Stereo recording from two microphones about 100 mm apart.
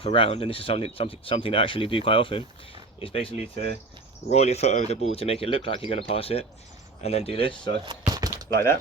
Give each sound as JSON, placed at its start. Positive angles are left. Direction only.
{"t": 0.0, "sound": "speech", "side_deg": 65}
{"t": 4.4, "sound": "speech", "side_deg": 90}
{"t": 7.0, "sound": "speech", "side_deg": 90}
{"t": 7.9, "sound": "a sound", "side_deg": -40}